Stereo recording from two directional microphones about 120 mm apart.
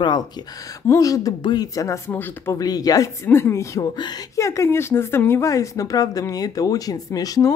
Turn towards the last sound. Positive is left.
turn(degrees=30)  # may be behind; listen again after turning